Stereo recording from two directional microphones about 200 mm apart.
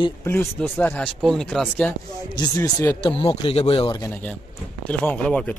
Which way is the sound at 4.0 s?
10° left (ahead or behind).